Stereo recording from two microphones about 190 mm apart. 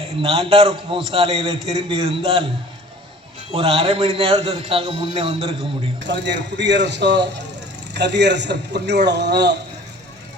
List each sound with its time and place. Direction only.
0.2 s a man's voice: 30° right (ahead or behind)
3.5 s a man's voice: 30° right (ahead or behind)
6.1 s a man's voice: 65° right (ahead or behind)